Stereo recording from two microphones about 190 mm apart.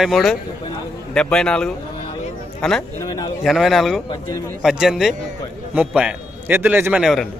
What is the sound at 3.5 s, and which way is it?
A man's voice, centre (ahead or behind).